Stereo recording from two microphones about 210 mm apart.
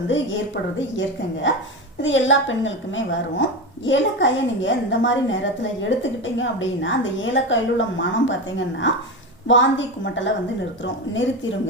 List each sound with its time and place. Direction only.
0.1 s a woman's voice: 60° left (ahead or behind)